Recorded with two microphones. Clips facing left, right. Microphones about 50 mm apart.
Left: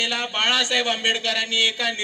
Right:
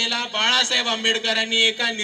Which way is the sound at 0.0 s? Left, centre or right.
Centre.